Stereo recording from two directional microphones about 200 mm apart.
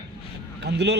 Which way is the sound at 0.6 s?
60° right (ahead or behind).